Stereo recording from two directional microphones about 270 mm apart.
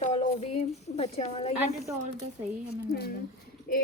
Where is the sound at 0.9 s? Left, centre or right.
Left.